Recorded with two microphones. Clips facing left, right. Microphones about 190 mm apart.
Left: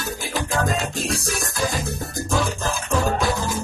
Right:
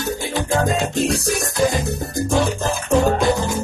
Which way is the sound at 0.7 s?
Centre (ahead or behind).